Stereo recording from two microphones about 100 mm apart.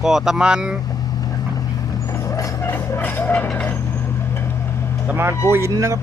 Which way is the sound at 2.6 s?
25° left (ahead or behind).